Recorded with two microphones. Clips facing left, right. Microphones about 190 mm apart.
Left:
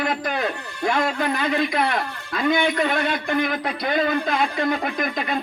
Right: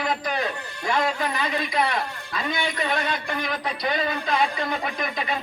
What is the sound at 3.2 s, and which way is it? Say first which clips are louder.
A man's voice: left 6 dB; 50° left (ahead or behind).